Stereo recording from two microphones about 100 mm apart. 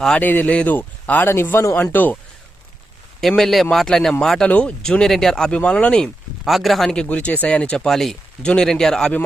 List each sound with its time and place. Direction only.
0.2 s speech: 15° left (ahead or behind)
3.2 s speech: 5° left (ahead or behind)
6.4 s speech: centre (ahead or behind)